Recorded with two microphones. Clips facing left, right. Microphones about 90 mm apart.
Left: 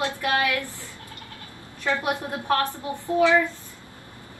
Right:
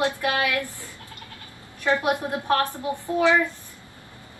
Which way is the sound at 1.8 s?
20° right (ahead or behind).